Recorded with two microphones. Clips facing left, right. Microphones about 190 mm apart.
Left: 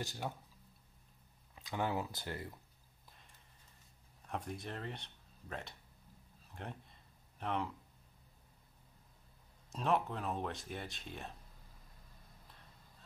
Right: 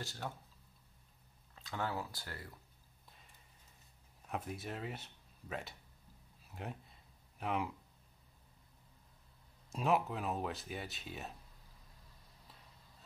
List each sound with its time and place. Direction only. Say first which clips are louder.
0.0 s speech: left 3 dB; 15° left (ahead or behind)
1.5 s speech: left 3 dB; 15° left (ahead or behind)
4.3 s speech: right 1 dB; 5° right (ahead or behind)
6.5 s a sound: right 2 dB; 5° right (ahead or behind)
9.7 s speech: right 1 dB; 5° right (ahead or behind)